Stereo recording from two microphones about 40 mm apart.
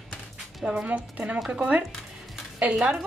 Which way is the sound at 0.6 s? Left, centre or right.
Right.